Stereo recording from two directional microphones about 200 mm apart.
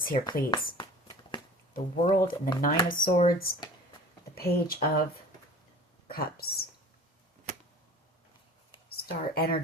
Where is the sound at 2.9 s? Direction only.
45° left (ahead or behind).